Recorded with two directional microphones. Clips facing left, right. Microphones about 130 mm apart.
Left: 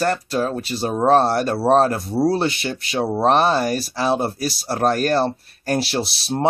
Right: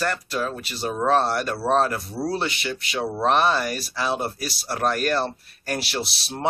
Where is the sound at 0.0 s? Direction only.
35° left (ahead or behind).